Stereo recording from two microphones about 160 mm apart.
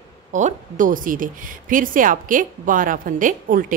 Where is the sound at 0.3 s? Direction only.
50° right (ahead or behind).